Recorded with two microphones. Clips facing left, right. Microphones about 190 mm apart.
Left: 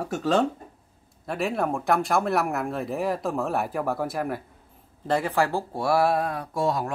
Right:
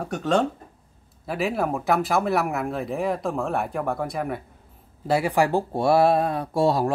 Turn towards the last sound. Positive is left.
turn(degrees=-30)  # may be behind; listen again after turning